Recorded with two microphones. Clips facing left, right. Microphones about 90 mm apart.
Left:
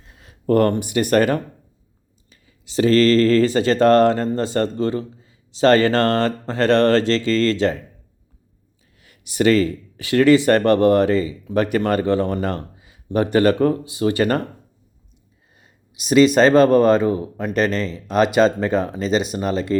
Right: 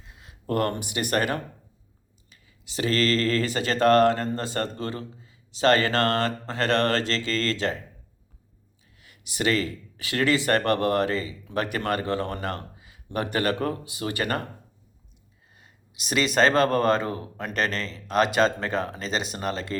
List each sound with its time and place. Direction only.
0.3 s speech: 30° left (ahead or behind)
9.0 s speech: 35° left (ahead or behind)
15.6 s speech: 20° left (ahead or behind)